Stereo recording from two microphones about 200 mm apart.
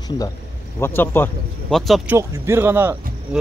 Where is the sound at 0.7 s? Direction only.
10° left (ahead or behind).